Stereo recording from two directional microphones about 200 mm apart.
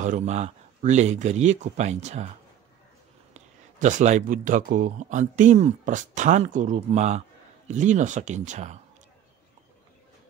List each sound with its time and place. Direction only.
0.0 s speech: 35° right (ahead or behind)
3.3 s speech: 35° right (ahead or behind)